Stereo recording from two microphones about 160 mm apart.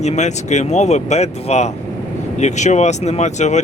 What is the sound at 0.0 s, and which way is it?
Speech, 45° left (ahead or behind).